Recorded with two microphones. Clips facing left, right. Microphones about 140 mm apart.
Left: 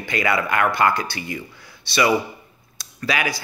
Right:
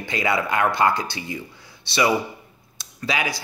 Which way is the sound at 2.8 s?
25° right (ahead or behind).